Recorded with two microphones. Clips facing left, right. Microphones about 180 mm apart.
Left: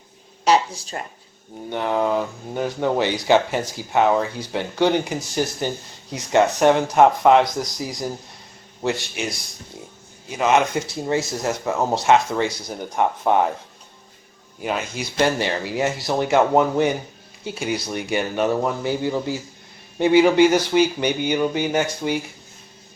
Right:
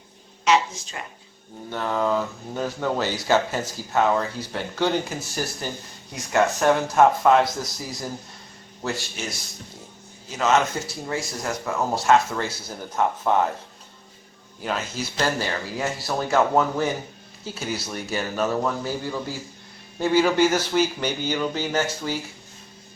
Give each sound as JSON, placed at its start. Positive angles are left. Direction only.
{"t": 0.4, "sound": "a sound", "side_deg": 35}
{"t": 1.7, "sound": "speech", "side_deg": 20}
{"t": 10.3, "sound": "speech", "side_deg": 15}
{"t": 14.6, "sound": "speech", "side_deg": 10}